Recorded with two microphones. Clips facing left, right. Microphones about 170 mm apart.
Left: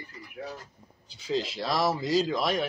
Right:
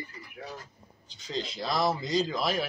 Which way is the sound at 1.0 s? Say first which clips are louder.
Left 5 dB; 10° left (ahead or behind).